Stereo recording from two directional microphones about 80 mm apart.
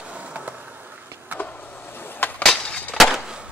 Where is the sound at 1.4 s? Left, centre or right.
Left.